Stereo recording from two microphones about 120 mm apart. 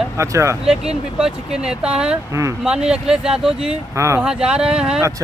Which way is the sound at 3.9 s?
25° right (ahead or behind).